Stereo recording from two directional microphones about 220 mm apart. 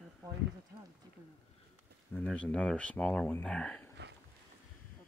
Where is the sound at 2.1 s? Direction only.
5° left (ahead or behind).